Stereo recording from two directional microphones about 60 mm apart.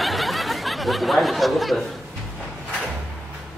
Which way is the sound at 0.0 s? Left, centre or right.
Centre.